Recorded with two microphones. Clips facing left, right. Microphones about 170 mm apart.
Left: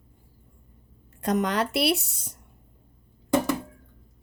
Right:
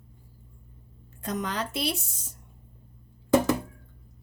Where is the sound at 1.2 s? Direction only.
65° left (ahead or behind).